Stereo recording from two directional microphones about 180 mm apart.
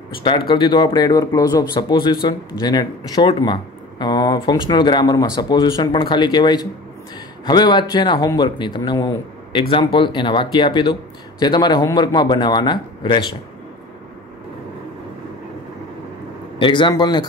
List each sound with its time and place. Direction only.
0.2 s speech: 30° left (ahead or behind)
16.5 s speech: 25° left (ahead or behind)